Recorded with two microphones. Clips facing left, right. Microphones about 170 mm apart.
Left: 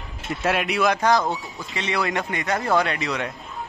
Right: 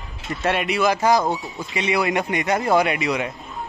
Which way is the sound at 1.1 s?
20° right (ahead or behind).